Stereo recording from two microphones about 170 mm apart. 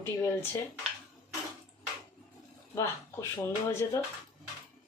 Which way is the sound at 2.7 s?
15° left (ahead or behind).